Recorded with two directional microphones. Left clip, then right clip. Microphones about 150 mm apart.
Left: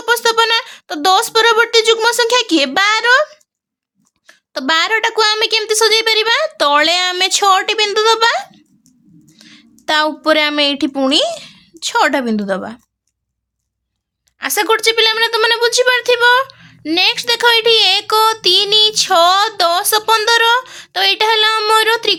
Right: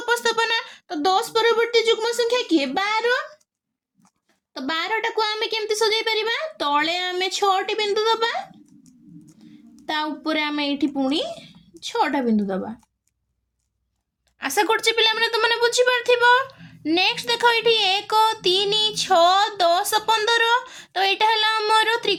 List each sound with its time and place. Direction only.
0.0 s a woman's voice: 20° left (ahead or behind); by 12.8 s 55° left (ahead or behind)
14.3 s speech: 15° left (ahead or behind)